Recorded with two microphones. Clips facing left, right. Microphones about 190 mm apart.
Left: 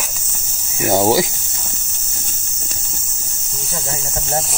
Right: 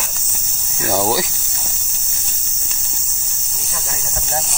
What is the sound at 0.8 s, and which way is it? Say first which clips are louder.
Speech: left 4 dB; 25° left (ahead or behind).